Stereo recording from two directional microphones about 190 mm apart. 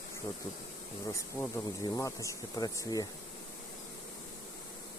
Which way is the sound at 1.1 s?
15° left (ahead or behind).